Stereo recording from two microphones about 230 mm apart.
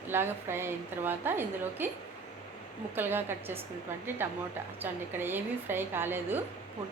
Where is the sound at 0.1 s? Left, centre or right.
Centre.